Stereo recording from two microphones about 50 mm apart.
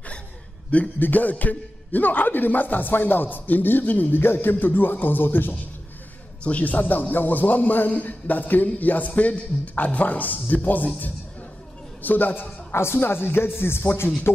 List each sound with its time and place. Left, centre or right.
0.9 s a man's voice: left
6.4 s a man's voice: left
12.0 s a man's voice: left
12.7 s speech: left